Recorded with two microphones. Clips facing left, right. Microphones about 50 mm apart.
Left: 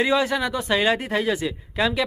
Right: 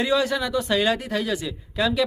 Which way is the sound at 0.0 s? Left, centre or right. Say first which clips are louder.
Left 1 dB; centre.